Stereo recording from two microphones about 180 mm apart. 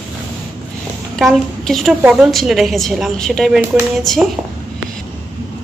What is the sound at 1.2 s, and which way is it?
A woman's voice, centre (ahead or behind).